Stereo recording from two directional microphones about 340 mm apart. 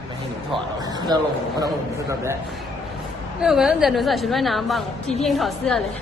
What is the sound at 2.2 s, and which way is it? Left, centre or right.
A woman's voice, centre.